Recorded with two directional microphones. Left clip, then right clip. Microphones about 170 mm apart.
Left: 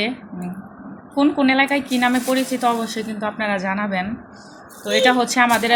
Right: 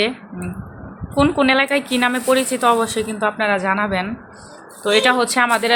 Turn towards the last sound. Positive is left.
turn(degrees=-20)  # may be behind; listen again after turning